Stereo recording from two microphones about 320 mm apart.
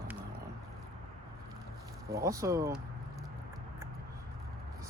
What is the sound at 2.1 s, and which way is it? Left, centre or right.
Speech, centre.